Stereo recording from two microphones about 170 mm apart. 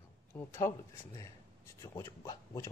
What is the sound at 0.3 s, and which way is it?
Speech, 15° left (ahead or behind).